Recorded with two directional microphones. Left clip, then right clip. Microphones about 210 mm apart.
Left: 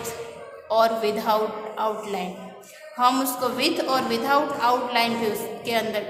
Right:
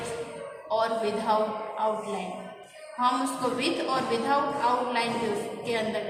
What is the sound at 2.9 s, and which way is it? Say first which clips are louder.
A woman's voice: left 5 dB; 50° left (ahead or behind).